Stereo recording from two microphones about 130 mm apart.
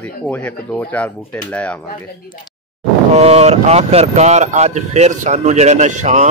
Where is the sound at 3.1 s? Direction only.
55° right (ahead or behind).